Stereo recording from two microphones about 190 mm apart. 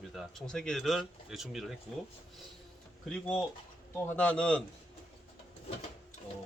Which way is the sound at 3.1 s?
5° left (ahead or behind).